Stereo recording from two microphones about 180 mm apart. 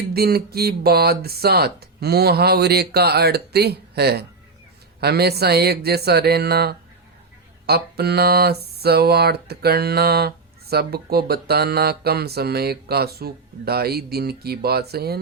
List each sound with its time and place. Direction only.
0.1 s speech: 60° right (ahead or behind)